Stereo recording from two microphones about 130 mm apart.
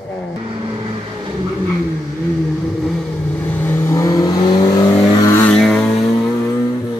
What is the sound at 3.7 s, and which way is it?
Vehicle, 20° left (ahead or behind).